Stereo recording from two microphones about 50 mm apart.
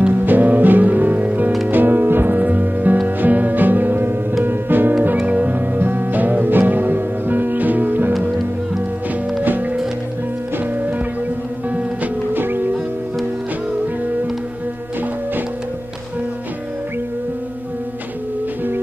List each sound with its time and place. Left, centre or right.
0.0 s music: right
5.2 s music: right
5.8 s music: right
9.4 s music: right
12.4 s music: right